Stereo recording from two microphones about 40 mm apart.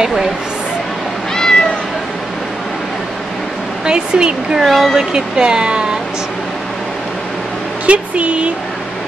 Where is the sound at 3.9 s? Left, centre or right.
Right.